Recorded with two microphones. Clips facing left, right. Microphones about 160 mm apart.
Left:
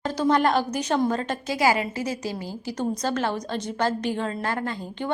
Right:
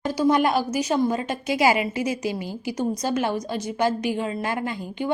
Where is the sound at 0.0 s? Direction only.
10° right (ahead or behind).